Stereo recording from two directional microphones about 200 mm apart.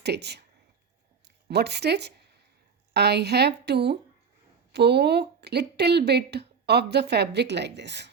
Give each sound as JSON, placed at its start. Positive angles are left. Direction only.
{"t": 0.0, "sound": "speech", "side_deg": -55}
{"t": 1.5, "sound": "speech", "side_deg": -55}